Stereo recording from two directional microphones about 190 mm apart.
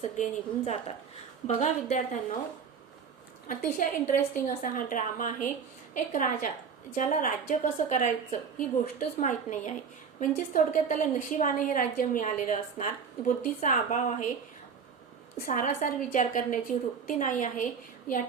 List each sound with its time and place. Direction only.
0.2 s a woman's voice: 35° left (ahead or behind)
3.5 s a woman's voice: 45° left (ahead or behind)
15.4 s a woman's voice: 45° left (ahead or behind)